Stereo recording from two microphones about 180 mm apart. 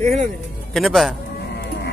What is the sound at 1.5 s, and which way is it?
Livestock, 65° left (ahead or behind).